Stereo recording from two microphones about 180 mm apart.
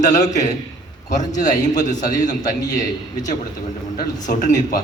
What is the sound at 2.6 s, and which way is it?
Speech, 20° left (ahead or behind).